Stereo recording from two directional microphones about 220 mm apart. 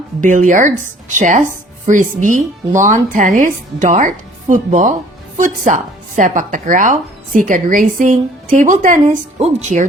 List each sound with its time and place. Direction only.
0.2 s speech: 35° right (ahead or behind)